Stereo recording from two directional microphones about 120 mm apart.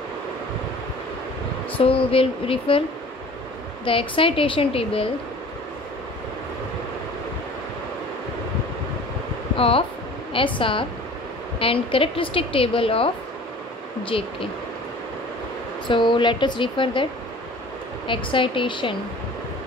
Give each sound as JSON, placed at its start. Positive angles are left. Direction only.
{"t": 1.8, "sound": "a woman's voice", "side_deg": 50}
{"t": 3.8, "sound": "a woman's voice", "side_deg": 45}
{"t": 9.6, "sound": "a woman's voice", "side_deg": 50}
{"t": 15.9, "sound": "a woman's voice", "side_deg": 40}